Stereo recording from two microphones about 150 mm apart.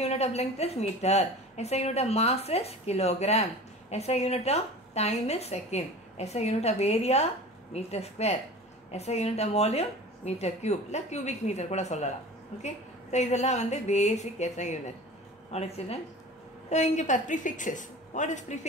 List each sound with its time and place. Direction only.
0.0 s a woman's voice: 45° left (ahead or behind)